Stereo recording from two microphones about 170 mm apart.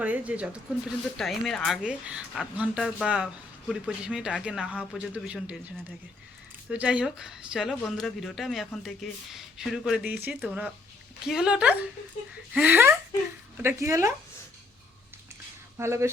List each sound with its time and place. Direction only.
0.0 s speech: 10° right (ahead or behind)
15.8 s speech: 15° right (ahead or behind)